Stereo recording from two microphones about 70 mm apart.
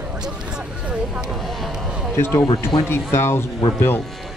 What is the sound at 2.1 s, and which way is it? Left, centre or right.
Speech, left.